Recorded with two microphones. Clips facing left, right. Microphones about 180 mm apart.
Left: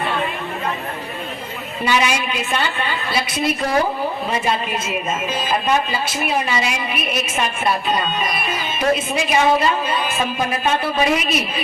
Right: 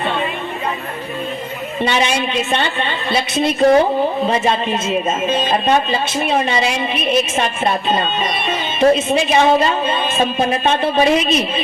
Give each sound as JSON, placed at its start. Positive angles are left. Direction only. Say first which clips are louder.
{"t": 1.8, "sound": "a woman's voice", "louder": "right 2 dB", "side_deg": -25}